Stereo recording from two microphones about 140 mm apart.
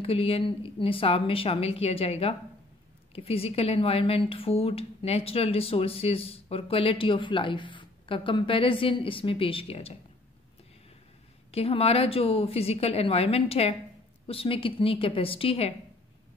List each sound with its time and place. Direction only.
0.0 s speech: 40° left (ahead or behind)
11.5 s a woman's voice: 45° left (ahead or behind)